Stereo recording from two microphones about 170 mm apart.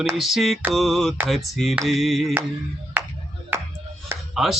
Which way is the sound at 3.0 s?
10° right (ahead or behind).